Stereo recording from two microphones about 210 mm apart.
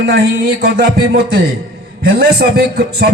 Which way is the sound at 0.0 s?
50° right (ahead or behind).